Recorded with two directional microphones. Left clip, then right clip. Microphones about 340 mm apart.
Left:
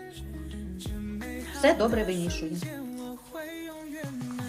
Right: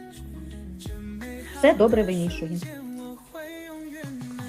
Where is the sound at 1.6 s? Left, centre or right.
Centre.